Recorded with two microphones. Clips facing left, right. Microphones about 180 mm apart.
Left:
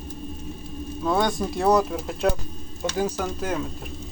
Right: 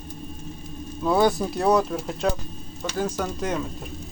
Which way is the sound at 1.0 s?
5° right (ahead or behind).